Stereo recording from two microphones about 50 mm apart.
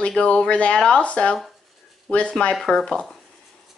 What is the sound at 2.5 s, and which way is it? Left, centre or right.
Speech, centre.